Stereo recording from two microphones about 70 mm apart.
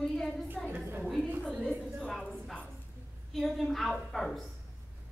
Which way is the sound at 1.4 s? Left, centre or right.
Centre.